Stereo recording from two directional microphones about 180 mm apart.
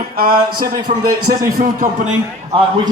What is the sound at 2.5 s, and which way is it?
Speech, 25° right (ahead or behind).